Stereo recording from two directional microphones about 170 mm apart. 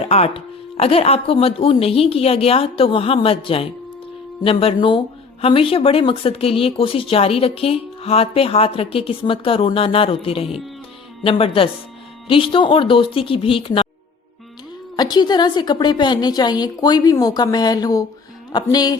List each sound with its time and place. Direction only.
0.1 s speech: 35° left (ahead or behind)
14.9 s a woman's voice: 25° left (ahead or behind)